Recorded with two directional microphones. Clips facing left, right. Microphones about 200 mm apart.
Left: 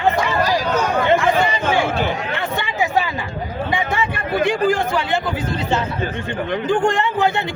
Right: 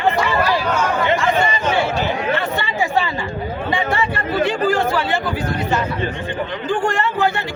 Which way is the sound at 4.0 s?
15° left (ahead or behind).